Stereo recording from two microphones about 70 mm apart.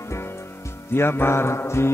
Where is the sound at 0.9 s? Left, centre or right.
Left.